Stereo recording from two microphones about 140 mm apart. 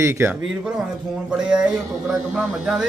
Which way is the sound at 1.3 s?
5° right (ahead or behind).